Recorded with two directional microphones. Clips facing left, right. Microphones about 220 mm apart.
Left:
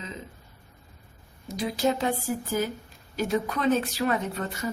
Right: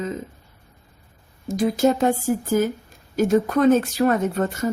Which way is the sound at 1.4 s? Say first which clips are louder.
Right 7 dB; 50° right (ahead or behind).